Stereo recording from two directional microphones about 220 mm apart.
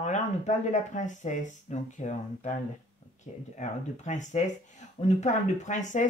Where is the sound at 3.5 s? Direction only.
35° left (ahead or behind).